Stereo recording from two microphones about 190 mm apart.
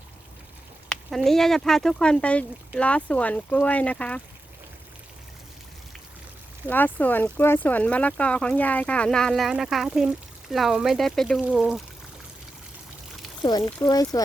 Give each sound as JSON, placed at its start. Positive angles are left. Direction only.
{"t": 0.9, "sound": "speech", "side_deg": 0}
{"t": 6.7, "sound": "speech", "side_deg": 10}
{"t": 13.4, "sound": "speech", "side_deg": 20}